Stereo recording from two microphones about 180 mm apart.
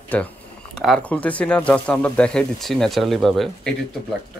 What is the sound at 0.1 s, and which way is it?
Speech, 5° left (ahead or behind).